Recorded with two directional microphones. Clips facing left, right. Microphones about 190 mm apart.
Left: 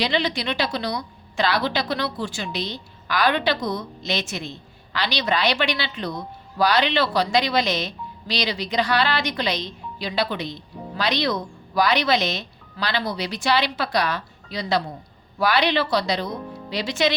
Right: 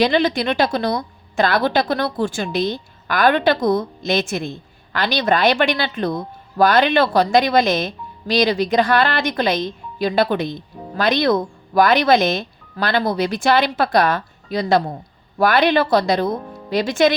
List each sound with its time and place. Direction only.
0.0 s a woman's voice: 50° right (ahead or behind)